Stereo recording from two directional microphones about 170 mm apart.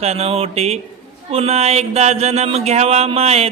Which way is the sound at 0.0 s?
35° right (ahead or behind).